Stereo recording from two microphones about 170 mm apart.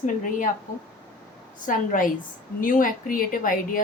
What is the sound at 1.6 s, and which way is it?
A woman's voice, 50° left (ahead or behind).